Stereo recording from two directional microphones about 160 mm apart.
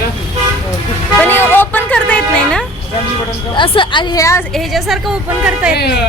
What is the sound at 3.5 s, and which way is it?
Speech, 30° left (ahead or behind).